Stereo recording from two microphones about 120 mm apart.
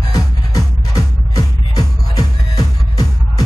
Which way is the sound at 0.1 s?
30° left (ahead or behind).